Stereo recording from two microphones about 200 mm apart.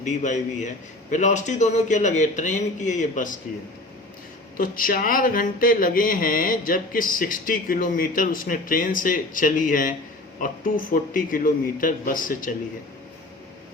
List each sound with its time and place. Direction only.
0.0 s a man's voice: 35° left (ahead or behind)
4.5 s speech: 45° left (ahead or behind)